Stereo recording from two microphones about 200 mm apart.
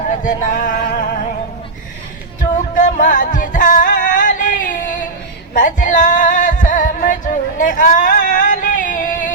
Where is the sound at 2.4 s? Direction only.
40° left (ahead or behind).